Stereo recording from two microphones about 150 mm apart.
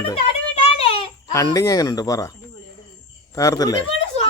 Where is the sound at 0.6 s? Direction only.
40° left (ahead or behind).